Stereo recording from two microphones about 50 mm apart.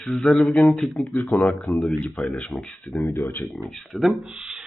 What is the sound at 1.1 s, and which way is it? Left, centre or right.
Speech, left.